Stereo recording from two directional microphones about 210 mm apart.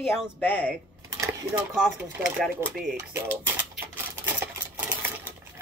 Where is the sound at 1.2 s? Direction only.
15° right (ahead or behind).